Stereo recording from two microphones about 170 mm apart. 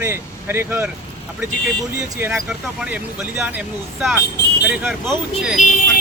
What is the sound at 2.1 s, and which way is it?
A man's voice, 15° right (ahead or behind).